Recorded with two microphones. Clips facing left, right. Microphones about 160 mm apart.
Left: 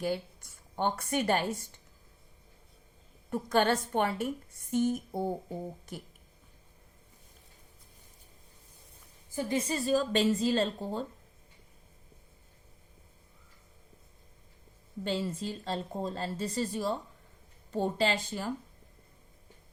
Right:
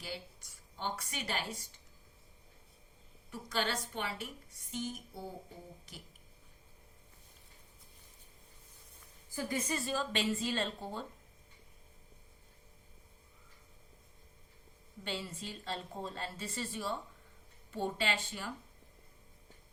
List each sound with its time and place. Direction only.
0.0 s speech: 55° left (ahead or behind)
3.2 s a woman's voice: 55° left (ahead or behind)
4.7 s a sound: 55° left (ahead or behind)
9.3 s a woman's voice: 20° left (ahead or behind); by 11.0 s 40° left (ahead or behind)
15.0 s a woman's voice: 40° left (ahead or behind)